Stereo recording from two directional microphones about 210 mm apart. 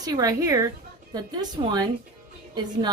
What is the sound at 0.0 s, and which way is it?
A woman's voice, 15° right (ahead or behind).